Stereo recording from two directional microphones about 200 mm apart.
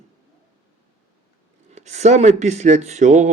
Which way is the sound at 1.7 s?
35° right (ahead or behind).